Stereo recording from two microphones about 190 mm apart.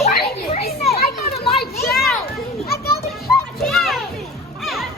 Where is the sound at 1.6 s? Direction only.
50° left (ahead or behind).